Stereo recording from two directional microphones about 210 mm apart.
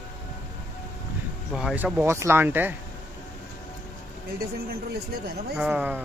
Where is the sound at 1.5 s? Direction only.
5° right (ahead or behind).